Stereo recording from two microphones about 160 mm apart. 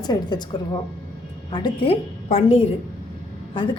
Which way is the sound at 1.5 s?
30° left (ahead or behind).